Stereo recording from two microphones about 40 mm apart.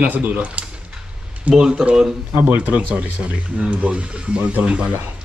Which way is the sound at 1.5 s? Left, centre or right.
Right.